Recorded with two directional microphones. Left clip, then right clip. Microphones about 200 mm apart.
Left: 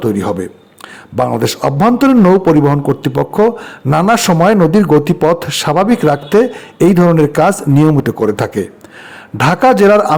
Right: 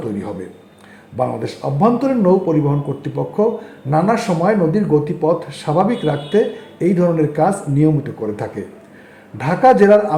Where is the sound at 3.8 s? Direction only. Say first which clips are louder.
Left 6 dB; 40° left (ahead or behind).